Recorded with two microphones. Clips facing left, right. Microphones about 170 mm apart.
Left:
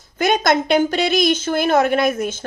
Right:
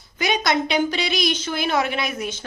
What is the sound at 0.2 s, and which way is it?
A woman's voice, 50° left (ahead or behind).